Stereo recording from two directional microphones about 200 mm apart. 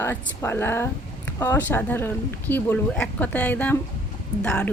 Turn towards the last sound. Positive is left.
turn(degrees=5)  # may be behind; listen again after turning